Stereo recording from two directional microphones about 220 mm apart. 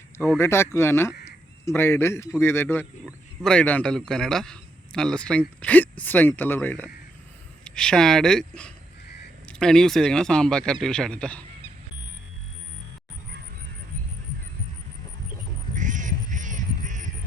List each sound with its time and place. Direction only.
0.2 s a man's voice: 10° left (ahead or behind)
15.7 s quack: 35° right (ahead or behind)